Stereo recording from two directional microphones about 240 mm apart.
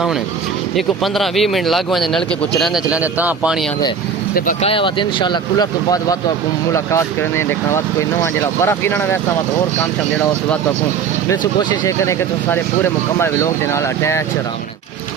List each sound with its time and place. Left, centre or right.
0.8 s a man's voice: centre
4.4 s speech: left
4.7 s speech: left
11.9 s speech: centre